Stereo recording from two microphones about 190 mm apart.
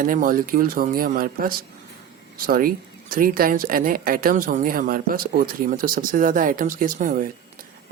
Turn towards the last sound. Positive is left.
turn(degrees=-45)  # may be behind; listen again after turning